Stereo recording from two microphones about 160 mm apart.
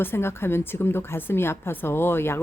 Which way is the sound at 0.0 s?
15° left (ahead or behind).